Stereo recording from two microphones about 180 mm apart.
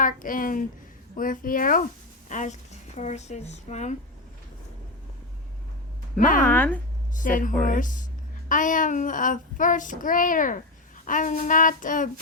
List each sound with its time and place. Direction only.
0.0 s child singing: 50° left (ahead or behind)
2.3 s speech: 40° left (ahead or behind)
6.1 s child singing: 50° left (ahead or behind)
6.5 s speech: 10° left (ahead or behind)
7.2 s child singing: 50° left (ahead or behind)